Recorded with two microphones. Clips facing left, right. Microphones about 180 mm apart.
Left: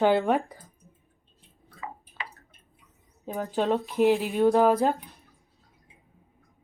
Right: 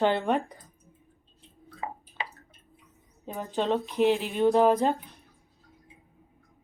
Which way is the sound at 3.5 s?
Centre (ahead or behind).